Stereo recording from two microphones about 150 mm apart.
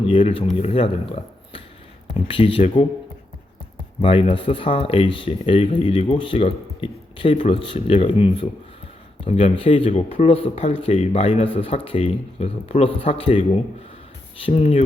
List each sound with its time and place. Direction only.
0.1 s speech: 35° left (ahead or behind)
4.0 s speech: 40° left (ahead or behind)
14.4 s speech: 40° left (ahead or behind)